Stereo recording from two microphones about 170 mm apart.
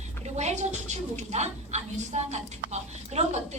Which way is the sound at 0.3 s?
45° right (ahead or behind).